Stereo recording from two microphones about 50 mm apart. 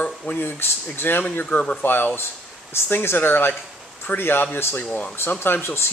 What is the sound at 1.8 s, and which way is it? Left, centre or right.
Speech, left.